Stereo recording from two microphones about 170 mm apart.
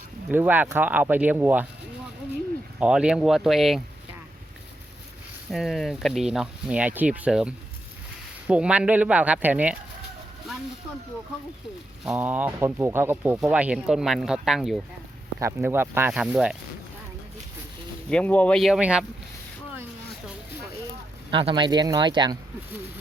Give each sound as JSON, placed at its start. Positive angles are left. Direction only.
{"t": 0.3, "sound": "speech", "side_deg": -10}
{"t": 2.7, "sound": "speech", "side_deg": -5}
{"t": 5.5, "sound": "speech", "side_deg": 0}
{"t": 12.0, "sound": "speech", "side_deg": -10}
{"t": 15.4, "sound": "speech", "side_deg": -15}
{"t": 18.1, "sound": "speech", "side_deg": 10}
{"t": 21.2, "sound": "speech", "side_deg": -30}